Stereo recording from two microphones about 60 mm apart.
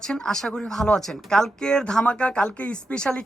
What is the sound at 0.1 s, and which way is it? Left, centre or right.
Speech, centre.